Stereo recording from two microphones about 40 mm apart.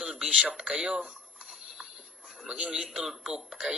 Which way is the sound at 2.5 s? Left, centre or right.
Right.